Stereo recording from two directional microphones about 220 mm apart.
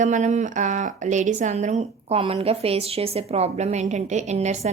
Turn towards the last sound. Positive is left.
turn(degrees=-30)  # may be behind; listen again after turning